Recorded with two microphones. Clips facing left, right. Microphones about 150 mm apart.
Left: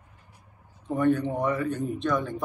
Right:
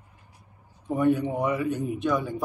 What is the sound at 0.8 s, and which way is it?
A man's voice, 10° right (ahead or behind).